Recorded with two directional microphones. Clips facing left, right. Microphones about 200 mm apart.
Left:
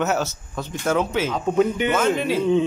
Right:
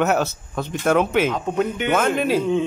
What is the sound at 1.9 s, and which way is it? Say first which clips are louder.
Speech: right 1 dB; 55° right (ahead or behind).